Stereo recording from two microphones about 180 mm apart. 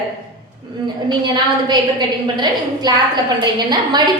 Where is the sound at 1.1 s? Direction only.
25° right (ahead or behind).